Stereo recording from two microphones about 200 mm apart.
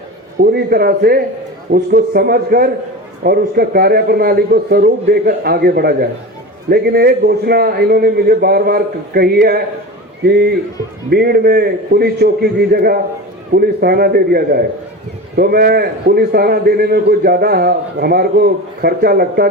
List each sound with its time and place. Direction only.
0.5 s a man's voice: 50° right (ahead or behind)